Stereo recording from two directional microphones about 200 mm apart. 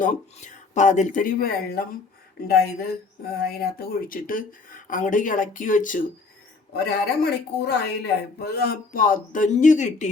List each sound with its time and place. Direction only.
0.0 s speech: 35° left (ahead or behind)
6.7 s speech: 55° left (ahead or behind); by 10.1 s 40° left (ahead or behind)